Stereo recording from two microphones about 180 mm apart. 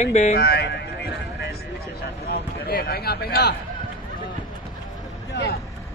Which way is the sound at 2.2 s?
65° left (ahead or behind).